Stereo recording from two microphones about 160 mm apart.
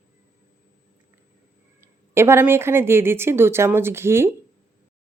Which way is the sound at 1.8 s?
15° right (ahead or behind).